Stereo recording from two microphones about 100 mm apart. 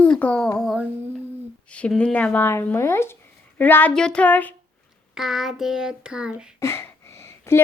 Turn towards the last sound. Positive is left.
turn(degrees=25)  # may be behind; listen again after turning